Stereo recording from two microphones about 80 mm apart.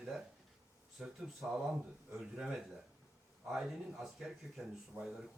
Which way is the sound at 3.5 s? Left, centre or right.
Centre.